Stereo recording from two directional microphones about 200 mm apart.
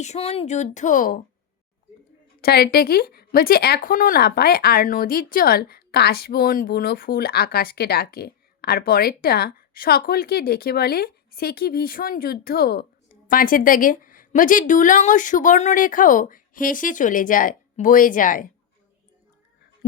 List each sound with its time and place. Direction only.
0.0 s speech: 35° left (ahead or behind)
2.4 s speech: 50° left (ahead or behind)